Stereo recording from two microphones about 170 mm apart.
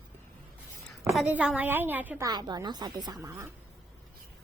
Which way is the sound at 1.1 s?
5° right (ahead or behind).